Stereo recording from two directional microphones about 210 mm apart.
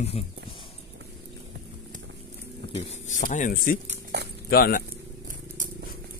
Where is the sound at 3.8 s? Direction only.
55° right (ahead or behind).